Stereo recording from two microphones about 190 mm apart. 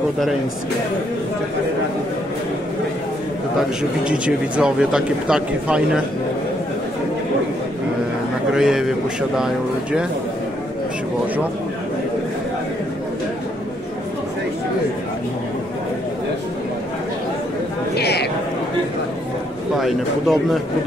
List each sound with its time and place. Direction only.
4.6 s speech: 5° right (ahead or behind)
8.5 s speech: centre (ahead or behind)
17.9 s a sound: 60° left (ahead or behind)
19.8 s speech: centre (ahead or behind)